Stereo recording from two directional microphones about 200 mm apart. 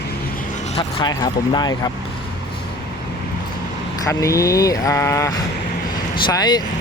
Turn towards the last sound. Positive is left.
turn(degrees=20)  # may be behind; listen again after turning